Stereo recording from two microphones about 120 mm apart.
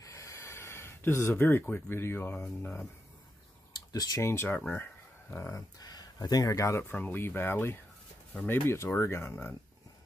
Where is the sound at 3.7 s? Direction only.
30° left (ahead or behind); by 5.5 s 15° left (ahead or behind).